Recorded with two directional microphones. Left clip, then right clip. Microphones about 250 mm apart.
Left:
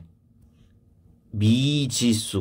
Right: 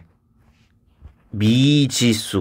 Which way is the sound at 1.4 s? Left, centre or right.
Right.